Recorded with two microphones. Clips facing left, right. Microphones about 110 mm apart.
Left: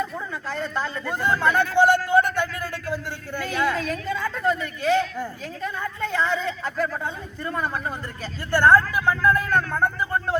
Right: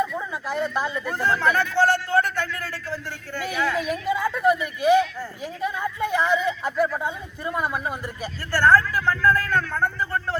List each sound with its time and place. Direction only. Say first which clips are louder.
0.5 s speech: right 3 dB; 15° right (ahead or behind)
1.2 s a man's voice: left 1 dB; 15° left (ahead or behind)
3.8 s speech: right 3 dB; 15° right (ahead or behind)
8.5 s speech: left 1 dB; 15° left (ahead or behind)